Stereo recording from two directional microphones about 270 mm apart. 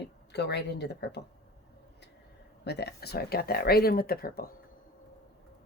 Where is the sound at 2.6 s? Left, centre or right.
Left.